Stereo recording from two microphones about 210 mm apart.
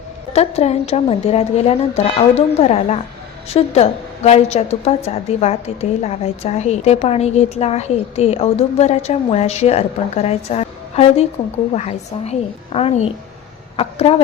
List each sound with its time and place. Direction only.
0.3 s a woman's voice: 30° left (ahead or behind)